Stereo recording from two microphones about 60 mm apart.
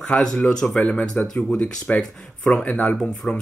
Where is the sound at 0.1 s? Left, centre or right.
Centre.